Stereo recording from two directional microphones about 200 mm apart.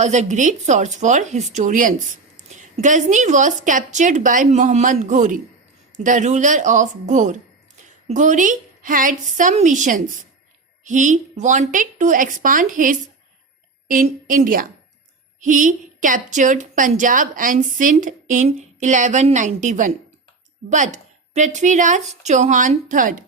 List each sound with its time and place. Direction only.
0.0 s a woman's voice: 35° right (ahead or behind)